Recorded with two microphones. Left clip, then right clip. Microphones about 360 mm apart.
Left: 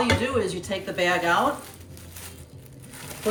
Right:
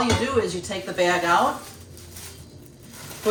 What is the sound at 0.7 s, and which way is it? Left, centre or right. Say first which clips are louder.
Speech: right 2 dB; centre.